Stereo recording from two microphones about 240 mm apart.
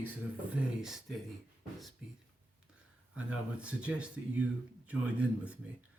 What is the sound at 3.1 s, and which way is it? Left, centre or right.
Speech, centre.